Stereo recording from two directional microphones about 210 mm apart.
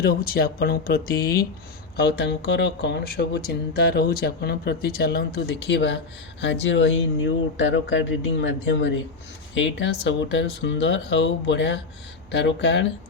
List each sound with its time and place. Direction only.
0.0 s speech: 45° left (ahead or behind)